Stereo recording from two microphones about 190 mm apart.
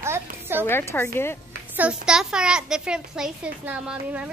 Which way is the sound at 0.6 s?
10° left (ahead or behind).